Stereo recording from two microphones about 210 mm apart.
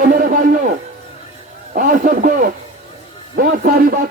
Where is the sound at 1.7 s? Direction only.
40° right (ahead or behind).